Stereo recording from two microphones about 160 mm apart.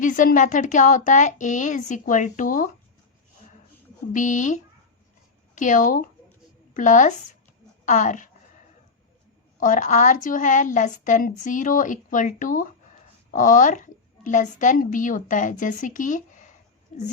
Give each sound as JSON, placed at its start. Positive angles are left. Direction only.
{"t": 0.0, "sound": "a woman's voice", "side_deg": 55}
{"t": 4.1, "sound": "a woman's voice", "side_deg": 50}
{"t": 9.6, "sound": "a woman's voice", "side_deg": 55}